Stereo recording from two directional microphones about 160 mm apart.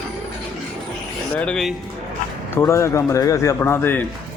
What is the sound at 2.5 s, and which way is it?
Speech, 15° left (ahead or behind).